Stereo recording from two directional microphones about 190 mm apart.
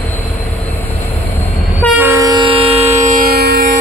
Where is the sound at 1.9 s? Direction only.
10° right (ahead or behind).